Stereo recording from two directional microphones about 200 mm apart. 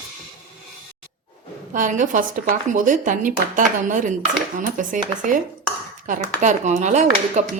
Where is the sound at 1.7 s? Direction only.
40° right (ahead or behind).